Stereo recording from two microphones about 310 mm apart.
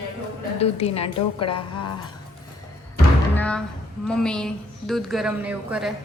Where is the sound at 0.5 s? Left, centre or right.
Centre.